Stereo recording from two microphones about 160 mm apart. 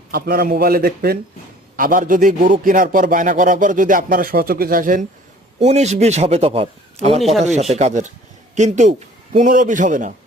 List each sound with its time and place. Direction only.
0.1 s a man's voice: 65° right (ahead or behind)
5.5 s a man's voice: 45° right (ahead or behind)
7.2 s speech: centre (ahead or behind)
7.4 s a man's voice: 45° right (ahead or behind)